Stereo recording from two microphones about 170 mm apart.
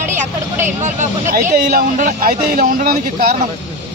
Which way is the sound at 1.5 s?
55° right (ahead or behind).